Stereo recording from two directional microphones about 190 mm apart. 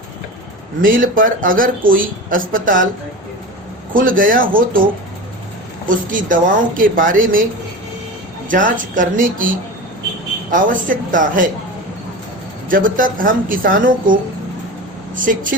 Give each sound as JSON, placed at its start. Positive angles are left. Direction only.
{"t": 0.8, "sound": "speech", "side_deg": -45}
{"t": 3.9, "sound": "speech", "side_deg": -45}
{"t": 6.1, "sound": "speech", "side_deg": -45}
{"t": 8.4, "sound": "speech", "side_deg": -45}
{"t": 10.5, "sound": "speech", "side_deg": -45}
{"t": 12.6, "sound": "speech", "side_deg": -45}